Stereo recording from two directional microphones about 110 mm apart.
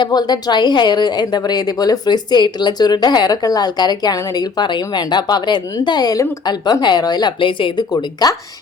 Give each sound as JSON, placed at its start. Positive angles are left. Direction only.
{"t": 0.0, "sound": "a woman's voice", "side_deg": 40}
{"t": 8.2, "sound": "a woman's voice", "side_deg": 35}